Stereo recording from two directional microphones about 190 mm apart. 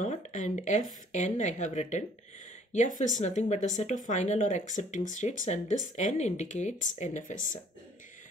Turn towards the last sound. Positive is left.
turn(degrees=45)  # may be behind; listen again after turning